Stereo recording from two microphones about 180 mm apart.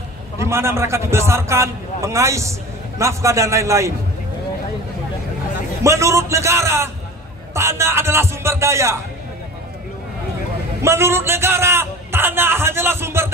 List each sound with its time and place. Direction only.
0.5 s a man's voice: 15° right (ahead or behind)
5.9 s a man's voice: 15° right (ahead or behind)
10.8 s a man's voice: 15° right (ahead or behind)